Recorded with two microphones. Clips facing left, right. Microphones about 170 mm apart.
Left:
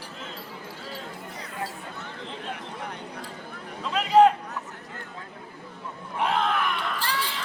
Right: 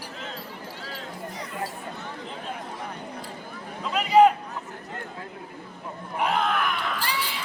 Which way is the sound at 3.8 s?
5° right (ahead or behind).